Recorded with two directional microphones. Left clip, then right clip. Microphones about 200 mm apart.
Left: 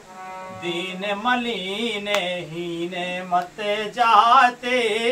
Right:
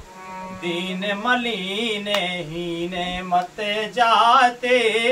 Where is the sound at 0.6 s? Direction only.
20° right (ahead or behind).